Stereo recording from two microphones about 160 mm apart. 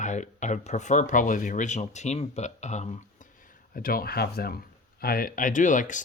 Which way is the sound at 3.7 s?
65° left (ahead or behind).